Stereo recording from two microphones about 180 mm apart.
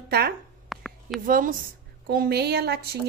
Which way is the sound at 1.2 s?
50° right (ahead or behind).